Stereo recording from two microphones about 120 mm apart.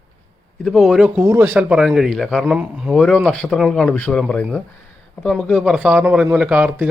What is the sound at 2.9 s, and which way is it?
Speech, 5° left (ahead or behind).